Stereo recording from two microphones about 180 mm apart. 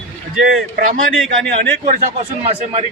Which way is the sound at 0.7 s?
90° right.